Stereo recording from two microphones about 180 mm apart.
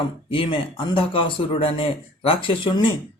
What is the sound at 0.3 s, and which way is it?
Speech, 30° left (ahead or behind).